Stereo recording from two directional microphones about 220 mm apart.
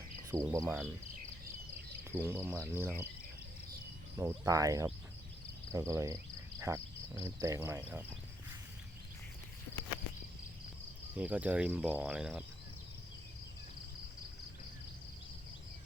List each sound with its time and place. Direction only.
0.3 s cricket: 15° right (ahead or behind)
2.0 s cricket: 10° right (ahead or behind)
4.2 s cricket: 15° right (ahead or behind)
11.2 s cricket: 5° right (ahead or behind)